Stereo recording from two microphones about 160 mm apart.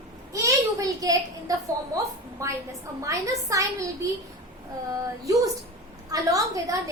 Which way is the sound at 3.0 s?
20° right (ahead or behind).